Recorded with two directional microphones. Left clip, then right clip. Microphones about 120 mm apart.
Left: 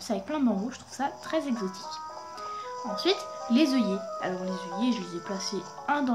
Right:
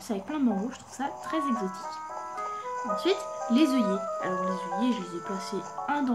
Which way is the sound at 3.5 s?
5° left (ahead or behind).